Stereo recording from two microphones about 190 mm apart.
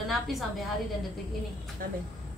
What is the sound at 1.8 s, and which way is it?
Speech, 50° right (ahead or behind).